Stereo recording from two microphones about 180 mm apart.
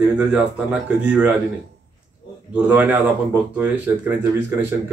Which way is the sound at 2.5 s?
10° right (ahead or behind).